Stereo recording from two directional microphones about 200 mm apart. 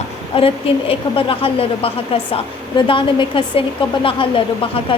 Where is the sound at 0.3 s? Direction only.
30° left (ahead or behind).